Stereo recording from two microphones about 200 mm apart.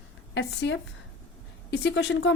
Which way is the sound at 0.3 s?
60° left (ahead or behind).